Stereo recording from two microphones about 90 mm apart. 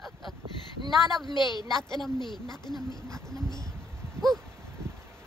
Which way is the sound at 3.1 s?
5° left (ahead or behind).